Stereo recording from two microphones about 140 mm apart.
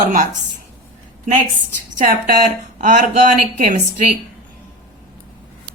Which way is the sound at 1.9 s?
70° right (ahead or behind).